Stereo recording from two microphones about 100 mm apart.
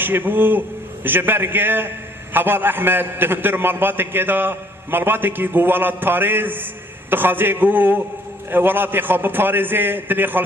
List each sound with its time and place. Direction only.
0.0 s a man's voice: 20° right (ahead or behind)